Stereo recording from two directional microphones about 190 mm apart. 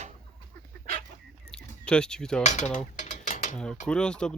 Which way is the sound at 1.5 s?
5° left (ahead or behind).